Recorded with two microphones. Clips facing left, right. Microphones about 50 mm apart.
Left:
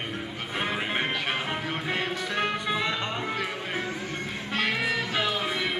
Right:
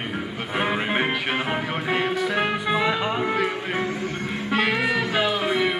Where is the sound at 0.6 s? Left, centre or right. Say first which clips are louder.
Right 5 dB; centre.